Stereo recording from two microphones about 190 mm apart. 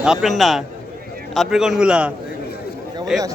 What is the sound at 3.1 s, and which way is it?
Speech, centre (ahead or behind).